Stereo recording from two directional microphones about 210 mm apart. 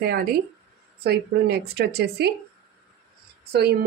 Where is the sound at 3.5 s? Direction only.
50° right (ahead or behind).